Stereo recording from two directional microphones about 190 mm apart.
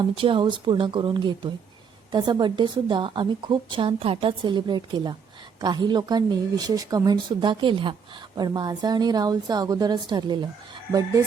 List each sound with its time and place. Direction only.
0.2 s a woman's voice: 25° right (ahead or behind)